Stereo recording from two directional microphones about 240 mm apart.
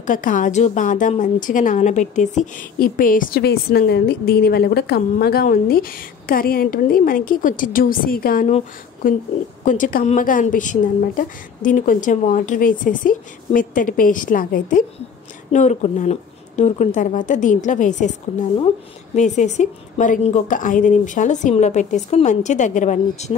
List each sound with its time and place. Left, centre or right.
0.0 s a woman's voice: left
19.1 s a woman's voice: left